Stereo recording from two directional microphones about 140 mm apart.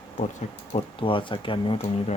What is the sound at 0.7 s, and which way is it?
Speech, 40° left (ahead or behind).